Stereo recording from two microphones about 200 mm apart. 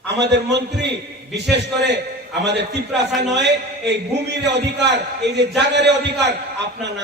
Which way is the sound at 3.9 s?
60° right (ahead or behind).